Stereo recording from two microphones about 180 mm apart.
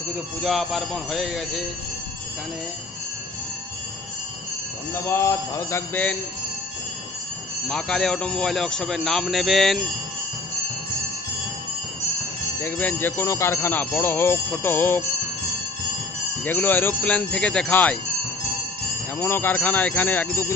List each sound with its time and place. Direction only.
0.4 s speech: centre (ahead or behind)
5.0 s speech: 15° left (ahead or behind)
7.6 s speech: 5° left (ahead or behind)
12.6 s speech: 10° left (ahead or behind)
16.4 s speech: 10° left (ahead or behind)
19.1 s speech: 10° left (ahead or behind)